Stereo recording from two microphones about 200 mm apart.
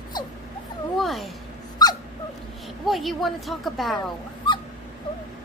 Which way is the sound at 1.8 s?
20° left (ahead or behind).